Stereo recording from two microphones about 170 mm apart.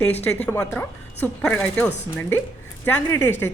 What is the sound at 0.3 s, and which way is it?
A woman's voice, 5° left (ahead or behind).